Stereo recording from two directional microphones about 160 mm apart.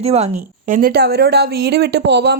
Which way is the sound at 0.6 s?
60° right (ahead or behind).